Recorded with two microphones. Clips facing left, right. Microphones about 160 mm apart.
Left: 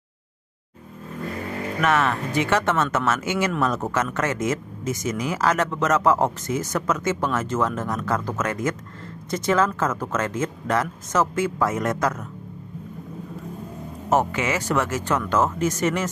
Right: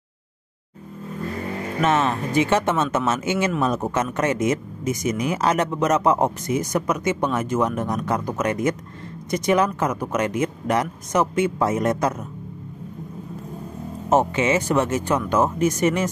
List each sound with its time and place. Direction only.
1.8 s speech: 20° right (ahead or behind)
14.1 s speech: 25° right (ahead or behind)